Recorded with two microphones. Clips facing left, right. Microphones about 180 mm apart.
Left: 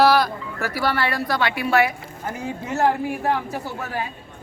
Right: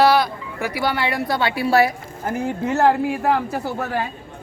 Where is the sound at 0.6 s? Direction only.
15° right (ahead or behind); by 1.9 s 35° right (ahead or behind).